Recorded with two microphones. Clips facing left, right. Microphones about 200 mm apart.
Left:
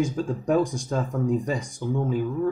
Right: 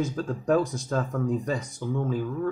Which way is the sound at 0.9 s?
15° left (ahead or behind).